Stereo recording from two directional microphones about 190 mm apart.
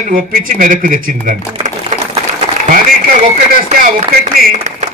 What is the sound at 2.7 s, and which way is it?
A man's voice, 45° right (ahead or behind).